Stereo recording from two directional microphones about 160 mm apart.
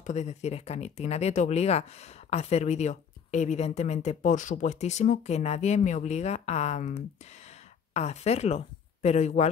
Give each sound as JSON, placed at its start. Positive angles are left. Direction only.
{"t": 0.0, "sound": "speech", "side_deg": 45}